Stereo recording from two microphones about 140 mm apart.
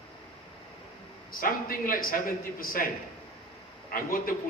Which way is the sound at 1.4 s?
90° left.